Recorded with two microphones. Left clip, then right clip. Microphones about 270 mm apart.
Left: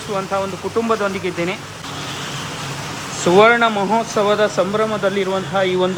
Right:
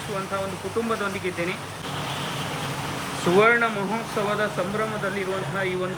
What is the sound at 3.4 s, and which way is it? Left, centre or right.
Speech, centre.